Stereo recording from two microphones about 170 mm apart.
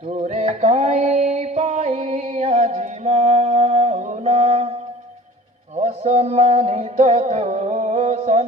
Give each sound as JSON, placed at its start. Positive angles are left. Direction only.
{"t": 0.1, "sound": "music", "side_deg": -45}
{"t": 5.7, "sound": "music", "side_deg": -40}